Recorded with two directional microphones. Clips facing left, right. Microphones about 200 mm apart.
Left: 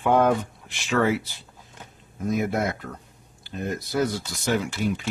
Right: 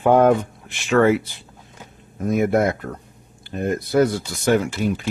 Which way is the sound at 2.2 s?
55° right (ahead or behind).